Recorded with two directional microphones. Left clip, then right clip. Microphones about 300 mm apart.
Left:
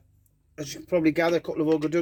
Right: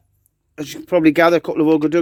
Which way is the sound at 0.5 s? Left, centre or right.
Right.